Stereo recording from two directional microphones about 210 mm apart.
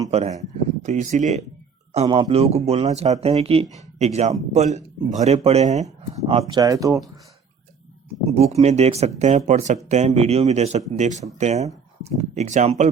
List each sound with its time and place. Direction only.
0.1 s speech: 30° right (ahead or behind)
6.5 s speech: 15° right (ahead or behind)
8.5 s speech: 30° right (ahead or behind)